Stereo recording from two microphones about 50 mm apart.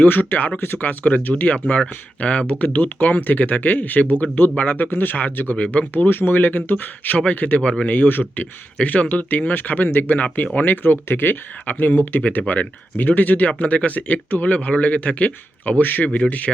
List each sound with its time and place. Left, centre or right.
0.0 s speech: left
1.6 s speech: left
7.6 s speech: centre
7.9 s speech: left